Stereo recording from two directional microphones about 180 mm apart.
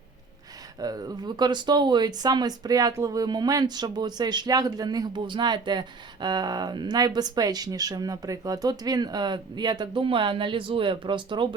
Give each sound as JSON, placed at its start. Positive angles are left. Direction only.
{"t": 0.8, "sound": "speech", "side_deg": -20}